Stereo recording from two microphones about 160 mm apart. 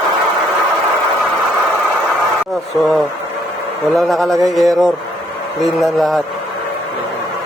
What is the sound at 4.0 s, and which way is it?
Speech, centre (ahead or behind).